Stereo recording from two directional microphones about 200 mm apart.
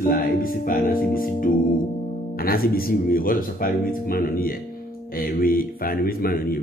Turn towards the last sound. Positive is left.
turn(degrees=45)  # may be behind; listen again after turning